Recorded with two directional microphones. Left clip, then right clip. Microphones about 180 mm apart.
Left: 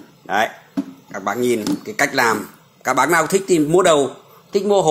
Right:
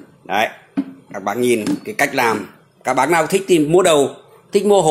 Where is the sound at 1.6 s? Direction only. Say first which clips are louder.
Right 1 dB; 15° right (ahead or behind).